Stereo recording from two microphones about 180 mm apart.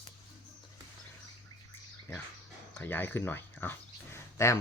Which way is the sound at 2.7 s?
10° left (ahead or behind).